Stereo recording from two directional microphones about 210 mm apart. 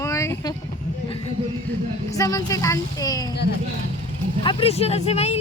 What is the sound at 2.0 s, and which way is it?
Speech, 15° left (ahead or behind).